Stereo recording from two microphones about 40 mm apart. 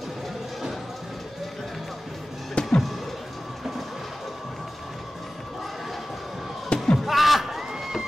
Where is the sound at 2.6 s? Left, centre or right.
Left.